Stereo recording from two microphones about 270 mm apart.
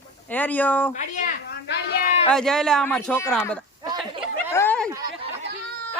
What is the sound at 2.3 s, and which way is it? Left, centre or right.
Speech, centre.